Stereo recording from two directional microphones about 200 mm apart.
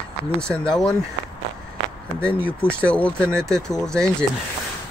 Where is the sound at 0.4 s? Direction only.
5° left (ahead or behind).